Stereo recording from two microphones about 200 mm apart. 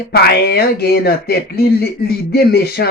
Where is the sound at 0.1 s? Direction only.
50° left (ahead or behind).